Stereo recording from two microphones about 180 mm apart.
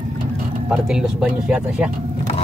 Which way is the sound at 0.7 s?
5° right (ahead or behind).